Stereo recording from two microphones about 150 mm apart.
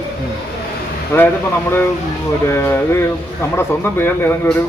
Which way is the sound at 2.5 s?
15° left (ahead or behind).